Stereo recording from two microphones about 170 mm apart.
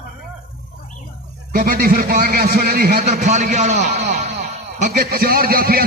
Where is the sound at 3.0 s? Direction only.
45° right (ahead or behind).